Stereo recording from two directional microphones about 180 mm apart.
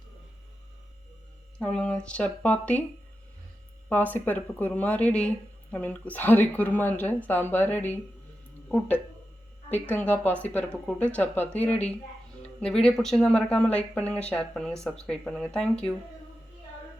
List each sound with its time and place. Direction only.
1.5 s a woman's voice: 5° left (ahead or behind)
3.8 s a woman's voice: 10° left (ahead or behind)
9.7 s a woman's voice: 10° left (ahead or behind)